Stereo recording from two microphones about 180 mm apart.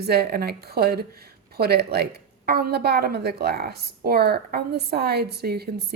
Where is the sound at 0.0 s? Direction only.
60° right (ahead or behind).